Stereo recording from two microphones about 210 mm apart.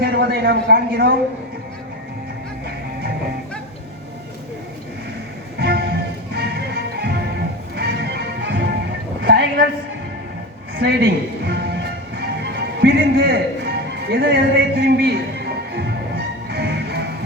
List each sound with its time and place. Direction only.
0.0 s a man's voice: 50° right (ahead or behind)
5.5 s music: 50° right (ahead or behind)
9.2 s a sound: 55° right (ahead or behind)
10.8 s music: 50° right (ahead or behind)